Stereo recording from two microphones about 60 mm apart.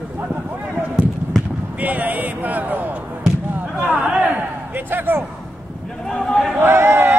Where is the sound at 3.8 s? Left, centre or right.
Right.